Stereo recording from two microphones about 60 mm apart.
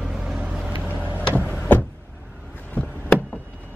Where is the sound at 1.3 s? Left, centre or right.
Left.